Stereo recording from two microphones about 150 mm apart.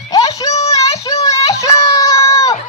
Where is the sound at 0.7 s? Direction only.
20° left (ahead or behind).